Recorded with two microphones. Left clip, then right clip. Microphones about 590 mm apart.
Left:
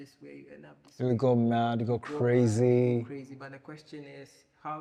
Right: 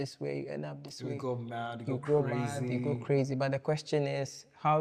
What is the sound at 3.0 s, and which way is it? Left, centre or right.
Speech, right.